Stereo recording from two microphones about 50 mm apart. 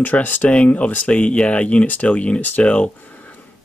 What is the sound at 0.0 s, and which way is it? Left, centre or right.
Speech, left.